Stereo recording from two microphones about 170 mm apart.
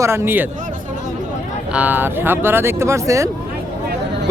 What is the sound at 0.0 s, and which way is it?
Speech, 15° right (ahead or behind).